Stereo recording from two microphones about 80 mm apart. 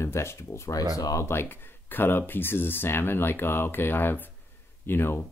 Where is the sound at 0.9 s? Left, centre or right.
Left.